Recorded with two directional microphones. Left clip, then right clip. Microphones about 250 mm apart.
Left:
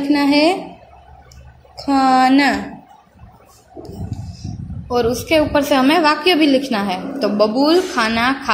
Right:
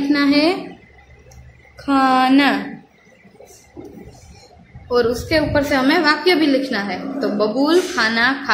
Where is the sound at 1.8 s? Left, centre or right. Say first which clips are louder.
Left 2 dB; centre.